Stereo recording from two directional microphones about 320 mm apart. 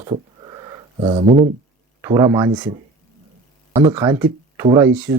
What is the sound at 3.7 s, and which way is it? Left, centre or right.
Speech, centre.